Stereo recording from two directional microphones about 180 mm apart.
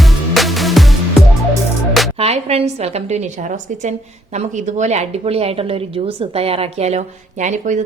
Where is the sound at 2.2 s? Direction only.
35° right (ahead or behind).